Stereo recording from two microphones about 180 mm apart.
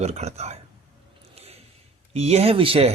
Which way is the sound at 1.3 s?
35° right (ahead or behind).